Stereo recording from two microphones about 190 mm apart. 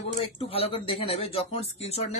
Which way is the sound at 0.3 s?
30° left (ahead or behind).